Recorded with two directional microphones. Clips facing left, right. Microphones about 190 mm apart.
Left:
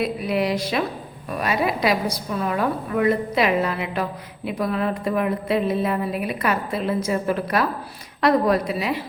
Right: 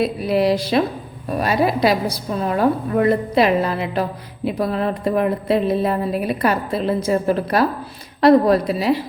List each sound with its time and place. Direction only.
0.0 s a woman's voice: 35° right (ahead or behind)